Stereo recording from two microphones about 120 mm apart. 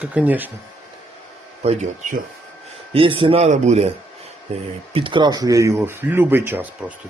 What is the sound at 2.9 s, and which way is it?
Speech, 50° right (ahead or behind).